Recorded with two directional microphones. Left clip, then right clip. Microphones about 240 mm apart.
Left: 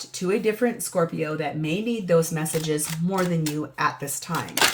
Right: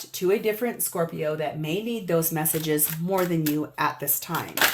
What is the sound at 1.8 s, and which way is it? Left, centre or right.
Speech, right.